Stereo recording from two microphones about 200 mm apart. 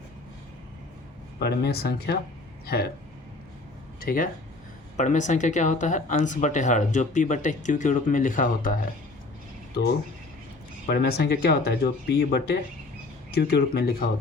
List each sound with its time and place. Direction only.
1.4 s speech: 55° left (ahead or behind)
4.0 s speech: 45° left (ahead or behind)
10.8 s speech: 50° left (ahead or behind)